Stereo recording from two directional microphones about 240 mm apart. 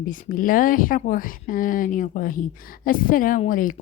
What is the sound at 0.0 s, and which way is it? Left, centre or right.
A woman's voice, left.